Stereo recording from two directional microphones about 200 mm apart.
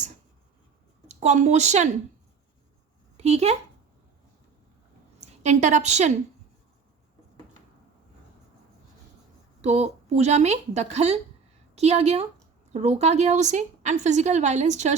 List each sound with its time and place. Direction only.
1.0 s a woman's voice: 35° right (ahead or behind)
3.2 s speech: 35° right (ahead or behind)
5.2 s a woman's voice: 35° right (ahead or behind)
9.6 s a woman's voice: 35° right (ahead or behind)